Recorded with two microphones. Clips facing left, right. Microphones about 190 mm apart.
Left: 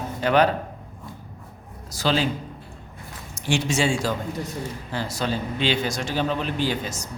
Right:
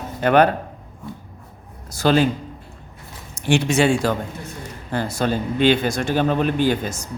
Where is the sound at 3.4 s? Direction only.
60° right (ahead or behind).